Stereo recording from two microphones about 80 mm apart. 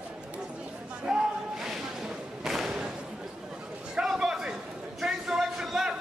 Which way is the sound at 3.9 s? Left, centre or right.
Centre.